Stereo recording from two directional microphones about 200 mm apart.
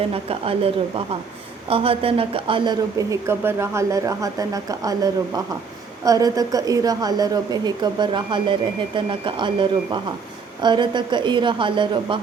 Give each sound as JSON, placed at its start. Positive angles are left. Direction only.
{"t": 0.1, "sound": "a woman's voice", "side_deg": -30}